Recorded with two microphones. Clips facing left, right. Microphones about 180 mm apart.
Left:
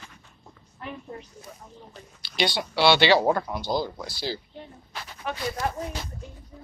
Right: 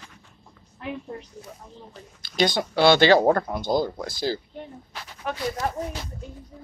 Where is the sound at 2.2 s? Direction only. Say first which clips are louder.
Right 4 dB; 45° right (ahead or behind).